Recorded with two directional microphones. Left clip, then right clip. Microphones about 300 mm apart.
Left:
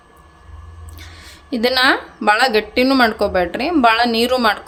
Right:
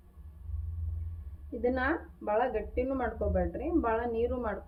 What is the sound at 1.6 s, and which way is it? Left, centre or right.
Speech, left.